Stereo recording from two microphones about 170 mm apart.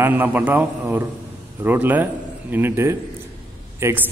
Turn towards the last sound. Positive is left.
turn(degrees=-15)  # may be behind; listen again after turning